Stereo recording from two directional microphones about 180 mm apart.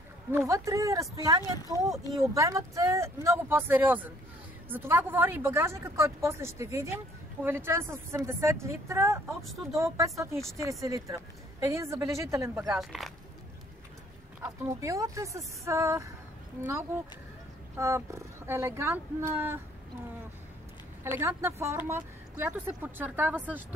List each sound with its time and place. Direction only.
0.3 s a woman's voice: 15° right (ahead or behind)
12.7 s speech: centre (ahead or behind)
14.4 s a woman's voice: 15° right (ahead or behind)
17.7 s a woman's voice: 15° right (ahead or behind)
21.0 s a woman's voice: 15° right (ahead or behind)